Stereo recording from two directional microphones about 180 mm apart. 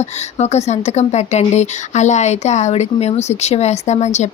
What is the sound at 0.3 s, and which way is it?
A woman's voice, 40° left (ahead or behind).